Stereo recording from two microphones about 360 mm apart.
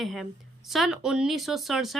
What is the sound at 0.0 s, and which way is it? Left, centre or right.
Speech, centre.